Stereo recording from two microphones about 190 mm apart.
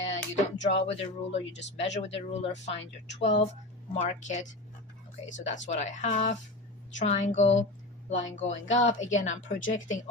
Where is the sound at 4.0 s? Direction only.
40° left (ahead or behind).